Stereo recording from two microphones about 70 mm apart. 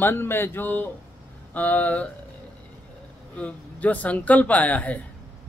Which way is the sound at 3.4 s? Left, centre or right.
Centre.